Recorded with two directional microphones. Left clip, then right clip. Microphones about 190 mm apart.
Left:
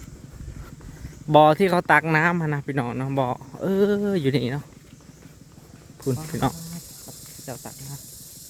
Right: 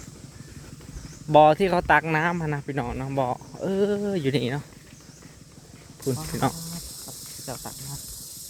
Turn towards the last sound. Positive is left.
turn(degrees=0)  # may be behind; listen again after turning